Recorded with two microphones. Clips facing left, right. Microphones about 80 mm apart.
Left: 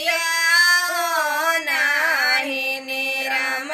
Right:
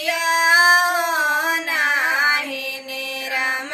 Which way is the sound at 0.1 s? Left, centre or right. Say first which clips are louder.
Right 4 dB; right.